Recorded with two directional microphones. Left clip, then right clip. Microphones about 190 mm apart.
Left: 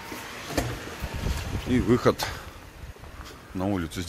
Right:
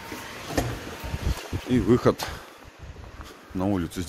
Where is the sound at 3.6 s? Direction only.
30° right (ahead or behind).